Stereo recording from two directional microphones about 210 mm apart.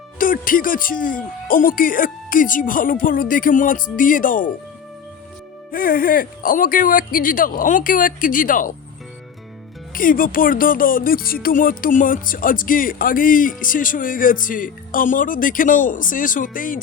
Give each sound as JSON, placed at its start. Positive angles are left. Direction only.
{"t": 0.2, "sound": "speech", "side_deg": 40}
{"t": 5.7, "sound": "speech", "side_deg": 40}
{"t": 9.9, "sound": "speech", "side_deg": 40}